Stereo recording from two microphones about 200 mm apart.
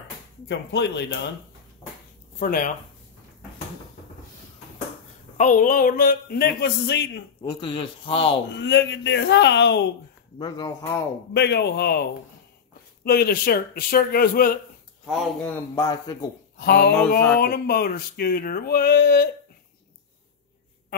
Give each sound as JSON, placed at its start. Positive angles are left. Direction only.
{"t": 0.5, "sound": "speech", "side_deg": 60}
{"t": 2.3, "sound": "speech", "side_deg": 45}
{"t": 5.4, "sound": "speech", "side_deg": 40}
{"t": 7.4, "sound": "a man's voice", "side_deg": 25}
{"t": 8.5, "sound": "speech", "side_deg": 60}
{"t": 10.4, "sound": "a man's voice", "side_deg": 20}
{"t": 11.3, "sound": "speech", "side_deg": 55}
{"t": 15.0, "sound": "speech", "side_deg": 0}
{"t": 15.7, "sound": "a man's voice", "side_deg": 20}
{"t": 16.5, "sound": "a sound", "side_deg": 50}
{"t": 17.4, "sound": "speech", "side_deg": 50}